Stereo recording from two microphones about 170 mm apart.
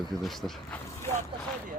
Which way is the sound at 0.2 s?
Centre (ahead or behind).